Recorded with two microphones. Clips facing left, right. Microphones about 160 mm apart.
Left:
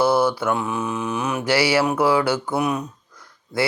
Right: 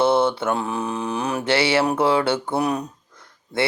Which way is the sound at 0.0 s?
25° right (ahead or behind).